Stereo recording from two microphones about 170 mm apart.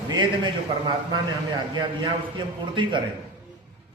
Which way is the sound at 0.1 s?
30° right (ahead or behind).